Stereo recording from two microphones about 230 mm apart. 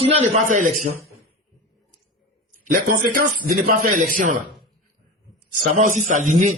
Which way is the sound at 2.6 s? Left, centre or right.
Right.